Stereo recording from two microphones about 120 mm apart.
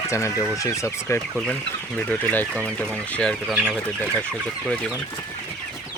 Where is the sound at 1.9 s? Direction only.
10° left (ahead or behind).